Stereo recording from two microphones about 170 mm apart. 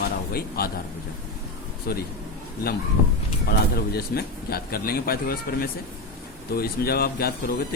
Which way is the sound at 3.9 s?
65° left (ahead or behind).